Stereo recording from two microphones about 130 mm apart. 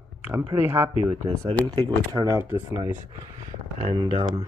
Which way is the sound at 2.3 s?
20° right (ahead or behind).